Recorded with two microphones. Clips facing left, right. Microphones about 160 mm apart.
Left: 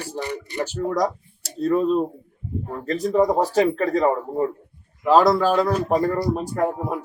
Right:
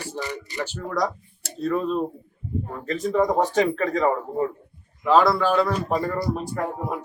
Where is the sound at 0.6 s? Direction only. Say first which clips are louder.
Left 4 dB; 40° left (ahead or behind).